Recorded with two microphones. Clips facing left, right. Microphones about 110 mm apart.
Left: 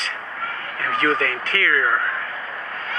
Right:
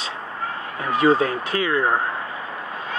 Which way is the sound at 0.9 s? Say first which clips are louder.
Right 4 dB; 10° right (ahead or behind).